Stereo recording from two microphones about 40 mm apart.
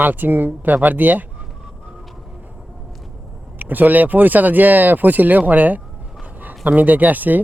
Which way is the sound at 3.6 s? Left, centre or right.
Right.